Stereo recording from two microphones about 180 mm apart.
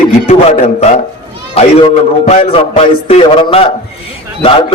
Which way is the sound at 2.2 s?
35° left (ahead or behind).